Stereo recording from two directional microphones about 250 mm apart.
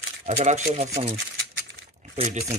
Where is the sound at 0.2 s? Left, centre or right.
Right.